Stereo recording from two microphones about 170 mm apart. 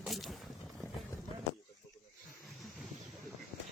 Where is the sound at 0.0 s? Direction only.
Centre (ahead or behind).